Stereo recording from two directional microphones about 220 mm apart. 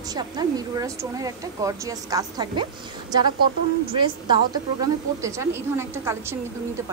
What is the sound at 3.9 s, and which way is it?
A woman's voice, 20° right (ahead or behind).